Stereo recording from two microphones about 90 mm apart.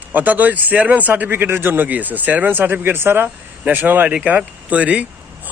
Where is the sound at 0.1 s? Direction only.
20° right (ahead or behind).